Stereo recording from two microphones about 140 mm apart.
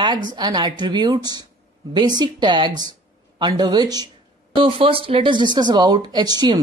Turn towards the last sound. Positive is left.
turn(degrees=-30)  # may be behind; listen again after turning